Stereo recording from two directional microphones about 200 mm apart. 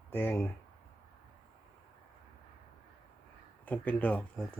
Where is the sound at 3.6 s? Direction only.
10° left (ahead or behind).